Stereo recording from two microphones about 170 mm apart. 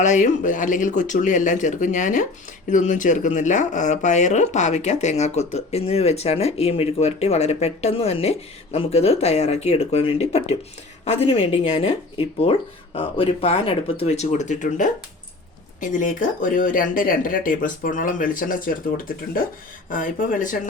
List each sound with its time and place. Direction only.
0.0 s speech: 45° left (ahead or behind)